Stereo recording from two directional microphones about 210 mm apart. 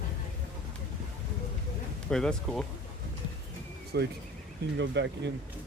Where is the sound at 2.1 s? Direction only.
5° left (ahead or behind).